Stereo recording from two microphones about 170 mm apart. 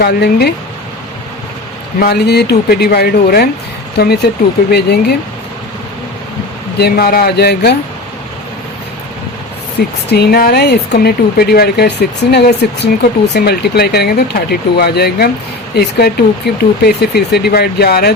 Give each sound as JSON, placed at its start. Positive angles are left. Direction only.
{"t": 0.0, "sound": "speech", "side_deg": 65}
{"t": 2.0, "sound": "speech", "side_deg": 70}
{"t": 6.7, "sound": "speech", "side_deg": 65}
{"t": 10.1, "sound": "speech", "side_deg": 65}